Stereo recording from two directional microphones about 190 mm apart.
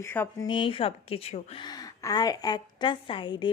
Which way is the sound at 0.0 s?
10° left (ahead or behind).